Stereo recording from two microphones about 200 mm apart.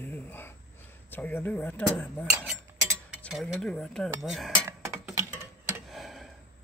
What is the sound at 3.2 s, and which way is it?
Cutlery, centre (ahead or behind).